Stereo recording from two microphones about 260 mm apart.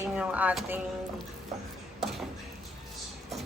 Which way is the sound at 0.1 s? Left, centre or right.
Centre.